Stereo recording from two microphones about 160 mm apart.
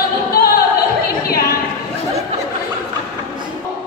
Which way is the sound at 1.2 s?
70° left (ahead or behind).